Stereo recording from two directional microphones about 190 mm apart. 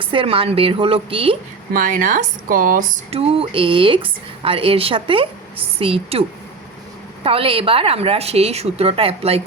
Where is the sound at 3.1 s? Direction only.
30° right (ahead or behind).